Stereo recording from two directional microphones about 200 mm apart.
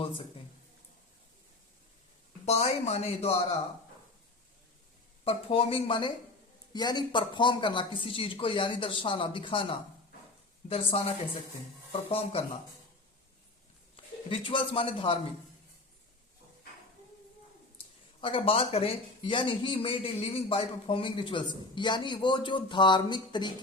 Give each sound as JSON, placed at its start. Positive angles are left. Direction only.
{"t": 2.5, "sound": "speech", "side_deg": 30}
{"t": 5.2, "sound": "speech", "side_deg": 30}
{"t": 13.9, "sound": "speech", "side_deg": 25}
{"t": 18.2, "sound": "speech", "side_deg": 25}